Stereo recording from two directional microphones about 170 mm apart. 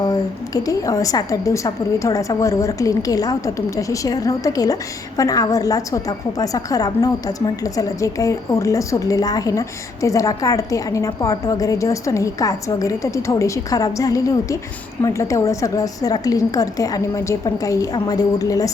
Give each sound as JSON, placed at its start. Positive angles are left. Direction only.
{"t": 0.0, "sound": "a woman's voice", "side_deg": 20}